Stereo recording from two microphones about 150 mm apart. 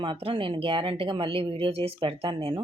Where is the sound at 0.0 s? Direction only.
35° right (ahead or behind).